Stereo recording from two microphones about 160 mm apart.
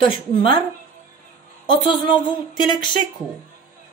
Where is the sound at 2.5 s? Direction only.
30° left (ahead or behind).